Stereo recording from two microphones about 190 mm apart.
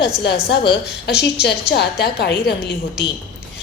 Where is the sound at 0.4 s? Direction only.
60° left (ahead or behind).